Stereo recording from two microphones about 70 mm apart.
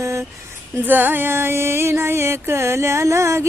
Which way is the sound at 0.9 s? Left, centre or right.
Right.